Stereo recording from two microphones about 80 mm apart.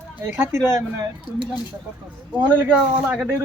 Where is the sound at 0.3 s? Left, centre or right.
Right.